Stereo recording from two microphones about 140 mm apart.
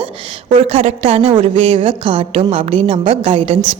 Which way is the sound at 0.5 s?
45° right (ahead or behind).